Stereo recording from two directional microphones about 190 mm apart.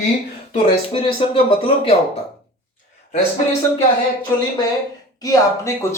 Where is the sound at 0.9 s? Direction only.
30° left (ahead or behind).